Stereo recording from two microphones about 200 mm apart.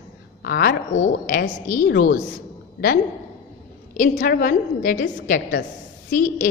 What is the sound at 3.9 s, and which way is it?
A woman's voice, 40° left (ahead or behind).